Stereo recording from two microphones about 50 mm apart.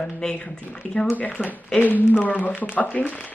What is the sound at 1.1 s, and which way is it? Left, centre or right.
Speech, left.